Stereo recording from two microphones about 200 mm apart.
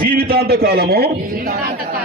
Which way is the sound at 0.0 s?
50° right (ahead or behind).